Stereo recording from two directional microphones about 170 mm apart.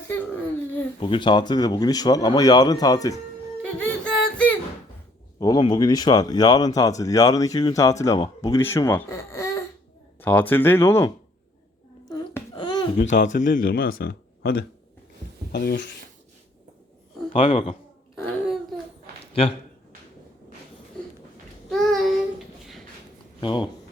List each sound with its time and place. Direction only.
0.1 s a sound: 10° left (ahead or behind)
0.9 s speech: 30° left (ahead or behind)
3.6 s music: 5° left (ahead or behind)
5.4 s speech: 25° left (ahead or behind)
12.0 s a sound: 20° left (ahead or behind)
13.5 s speech: 55° left (ahead or behind)
17.3 s speech: 45° left (ahead or behind)
19.2 s a sound: 35° left (ahead or behind)
21.7 s child singing: centre (ahead or behind)
23.4 s speech: 25° left (ahead or behind)